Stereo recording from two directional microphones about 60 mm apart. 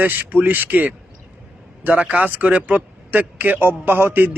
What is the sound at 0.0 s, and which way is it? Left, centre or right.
Speech, right.